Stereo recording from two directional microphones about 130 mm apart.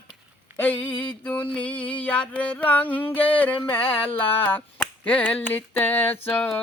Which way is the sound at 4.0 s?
45° left (ahead or behind).